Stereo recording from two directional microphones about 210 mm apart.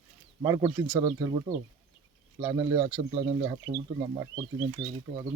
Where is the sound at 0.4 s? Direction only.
15° right (ahead or behind).